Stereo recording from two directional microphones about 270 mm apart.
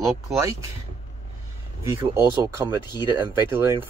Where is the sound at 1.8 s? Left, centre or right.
Centre.